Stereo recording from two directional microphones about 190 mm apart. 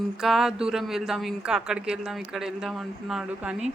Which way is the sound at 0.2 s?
Centre (ahead or behind).